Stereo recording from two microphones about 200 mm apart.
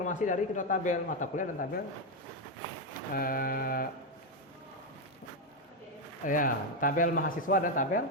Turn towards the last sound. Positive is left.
turn(degrees=45)  # may be behind; listen again after turning